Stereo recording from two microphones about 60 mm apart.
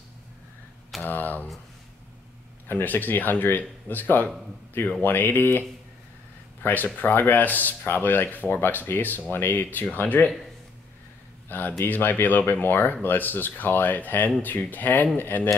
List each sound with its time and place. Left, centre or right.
1.0 s speech: left
2.7 s speech: left
6.6 s speech: left
11.4 s a man's voice: left